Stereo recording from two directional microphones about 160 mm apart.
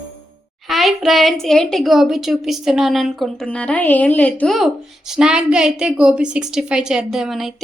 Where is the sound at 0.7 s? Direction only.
Centre (ahead or behind).